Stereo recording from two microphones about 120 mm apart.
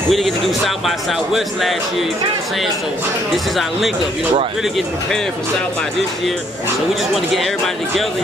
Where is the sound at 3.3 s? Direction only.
Centre (ahead or behind).